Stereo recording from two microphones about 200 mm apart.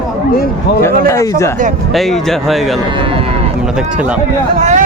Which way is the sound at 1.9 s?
Centre (ahead or behind).